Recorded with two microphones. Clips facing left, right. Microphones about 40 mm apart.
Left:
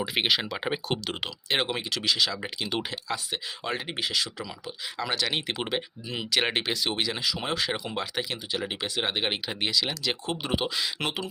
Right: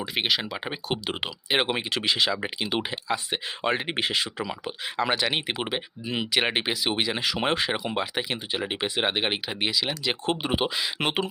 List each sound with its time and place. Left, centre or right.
0.0 s speech: centre
1.0 s speech: centre
1.6 s speech: right
3.3 s speech: right
5.2 s speech: centre
7.2 s speech: right
7.6 s speech: right